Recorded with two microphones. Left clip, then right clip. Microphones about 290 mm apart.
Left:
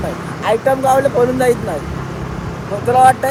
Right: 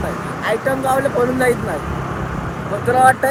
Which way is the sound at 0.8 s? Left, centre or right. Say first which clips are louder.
Left 3 dB; centre.